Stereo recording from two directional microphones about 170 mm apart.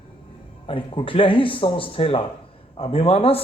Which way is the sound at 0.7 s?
30° left (ahead or behind).